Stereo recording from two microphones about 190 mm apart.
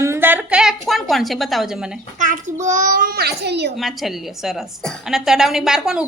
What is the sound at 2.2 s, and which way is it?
A child's voice, 40° right (ahead or behind).